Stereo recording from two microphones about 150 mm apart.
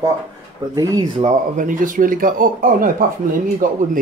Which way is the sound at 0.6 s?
20° right (ahead or behind).